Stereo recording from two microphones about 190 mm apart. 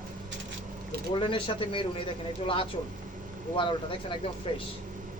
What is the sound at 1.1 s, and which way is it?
Speech, 25° left (ahead or behind).